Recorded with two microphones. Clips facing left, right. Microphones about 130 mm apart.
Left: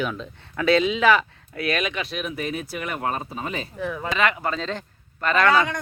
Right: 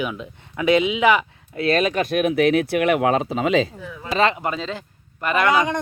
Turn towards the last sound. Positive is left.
turn(degrees=-15)  # may be behind; listen again after turning